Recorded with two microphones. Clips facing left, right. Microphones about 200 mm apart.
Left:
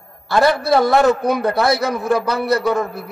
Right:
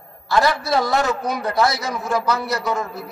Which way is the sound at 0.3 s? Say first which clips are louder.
Left 4 dB; 60° left (ahead or behind).